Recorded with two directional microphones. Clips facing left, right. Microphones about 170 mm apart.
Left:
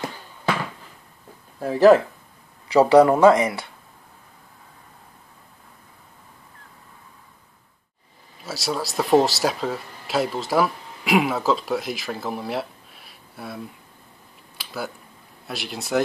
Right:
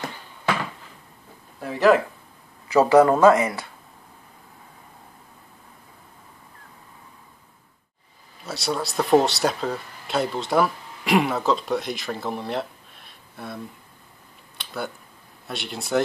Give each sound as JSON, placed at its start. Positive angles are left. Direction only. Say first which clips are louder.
{"t": 1.6, "sound": "speech", "louder": "left 4 dB", "side_deg": 35}
{"t": 2.8, "sound": "speech", "louder": "left 1 dB", "side_deg": 15}
{"t": 8.5, "sound": "speech", "louder": "even", "side_deg": 0}
{"t": 14.6, "sound": "a sound", "louder": "even", "side_deg": 0}
{"t": 15.4, "sound": "speech", "louder": "left 1 dB", "side_deg": 0}